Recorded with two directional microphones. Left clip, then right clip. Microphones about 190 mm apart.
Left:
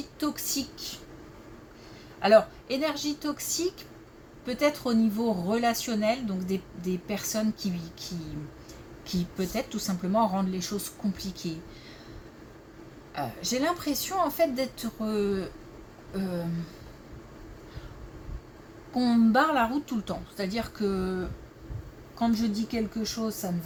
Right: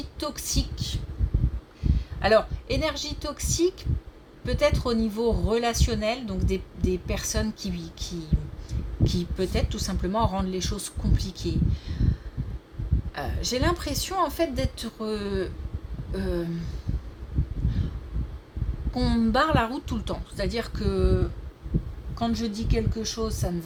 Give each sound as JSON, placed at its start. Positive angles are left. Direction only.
{"t": 0.2, "sound": "speech", "side_deg": -40}
{"t": 1.8, "sound": "a sound", "side_deg": -40}
{"t": 2.2, "sound": "speech", "side_deg": -40}
{"t": 13.1, "sound": "speech", "side_deg": -40}
{"t": 18.9, "sound": "speech", "side_deg": -40}